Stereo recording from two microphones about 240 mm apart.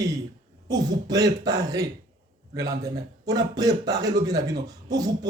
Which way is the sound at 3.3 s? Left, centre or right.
Centre.